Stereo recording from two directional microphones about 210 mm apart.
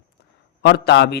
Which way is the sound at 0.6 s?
55° left (ahead or behind).